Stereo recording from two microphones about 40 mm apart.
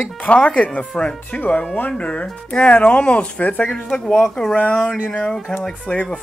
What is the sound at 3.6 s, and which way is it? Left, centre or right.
Speech, centre.